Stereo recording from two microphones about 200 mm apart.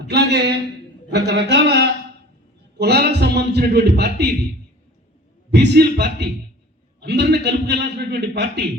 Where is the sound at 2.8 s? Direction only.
55° right (ahead or behind).